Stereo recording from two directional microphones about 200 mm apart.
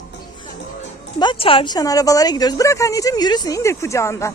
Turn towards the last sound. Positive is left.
turn(degrees=15)  # may be behind; listen again after turning